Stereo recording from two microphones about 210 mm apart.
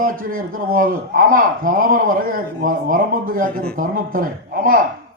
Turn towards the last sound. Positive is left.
turn(degrees=-40)  # may be behind; listen again after turning